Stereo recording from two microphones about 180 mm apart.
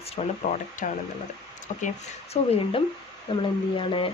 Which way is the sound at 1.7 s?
40° left (ahead or behind).